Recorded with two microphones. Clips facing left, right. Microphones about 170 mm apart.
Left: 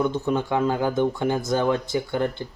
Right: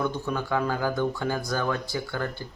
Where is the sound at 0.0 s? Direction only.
20° left (ahead or behind).